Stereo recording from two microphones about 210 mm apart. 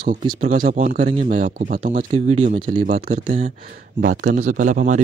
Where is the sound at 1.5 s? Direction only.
45° right (ahead or behind).